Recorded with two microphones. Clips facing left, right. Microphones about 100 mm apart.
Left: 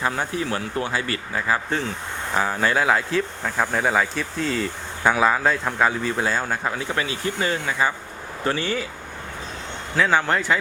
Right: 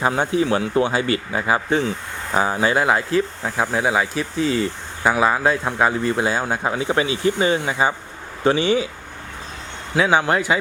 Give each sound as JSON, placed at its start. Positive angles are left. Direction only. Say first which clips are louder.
{"t": 0.0, "sound": "speech", "louder": "right 6 dB", "side_deg": -20}
{"t": 9.9, "sound": "speech", "louder": "right 3 dB", "side_deg": -15}